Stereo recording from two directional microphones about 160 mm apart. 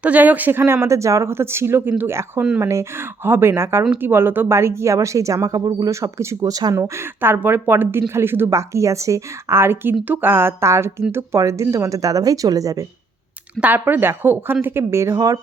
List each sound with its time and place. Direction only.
0.0 s speech: 10° right (ahead or behind)
13.6 s speech: 10° right (ahead or behind)